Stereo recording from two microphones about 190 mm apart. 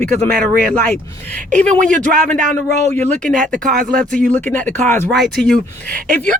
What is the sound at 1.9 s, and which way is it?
Speech, 40° right (ahead or behind).